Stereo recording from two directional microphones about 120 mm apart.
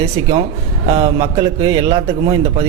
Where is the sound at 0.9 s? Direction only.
55° right (ahead or behind).